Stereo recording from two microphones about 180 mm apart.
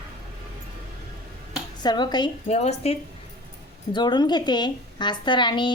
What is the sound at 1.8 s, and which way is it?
Speech, 25° left (ahead or behind).